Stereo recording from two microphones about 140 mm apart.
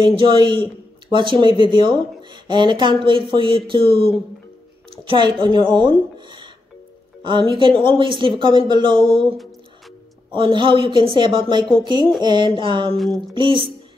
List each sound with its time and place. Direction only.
0.0 s speech: 35° right (ahead or behind)
10.3 s speech: 35° right (ahead or behind)
12.9 s music: centre (ahead or behind)
13.3 s speech: 35° right (ahead or behind)